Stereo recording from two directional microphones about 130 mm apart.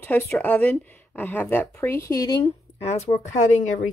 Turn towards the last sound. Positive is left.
turn(degrees=70)  # may be behind; listen again after turning